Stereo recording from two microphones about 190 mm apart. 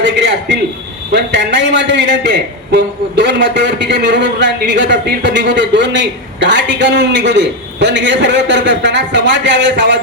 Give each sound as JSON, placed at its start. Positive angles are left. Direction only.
{"t": 0.0, "sound": "a man's voice", "side_deg": -65}